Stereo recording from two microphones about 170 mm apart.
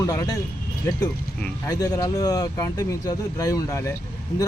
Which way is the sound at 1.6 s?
20° left (ahead or behind).